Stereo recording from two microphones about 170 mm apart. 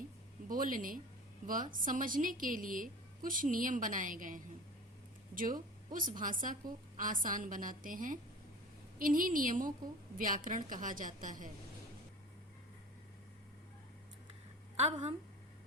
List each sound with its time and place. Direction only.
0.4 s a woman's voice: 55° right (ahead or behind)